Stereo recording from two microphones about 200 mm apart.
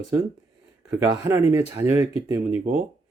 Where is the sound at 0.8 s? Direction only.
15° right (ahead or behind).